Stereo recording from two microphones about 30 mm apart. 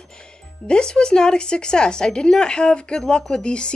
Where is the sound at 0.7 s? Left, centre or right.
Left.